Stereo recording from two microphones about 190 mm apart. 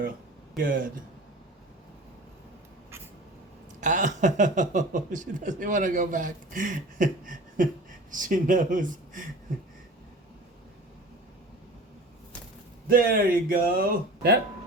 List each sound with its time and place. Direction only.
0.5 s speech: 45° right (ahead or behind)
3.8 s speech: 40° right (ahead or behind)
12.9 s speech: 50° right (ahead or behind)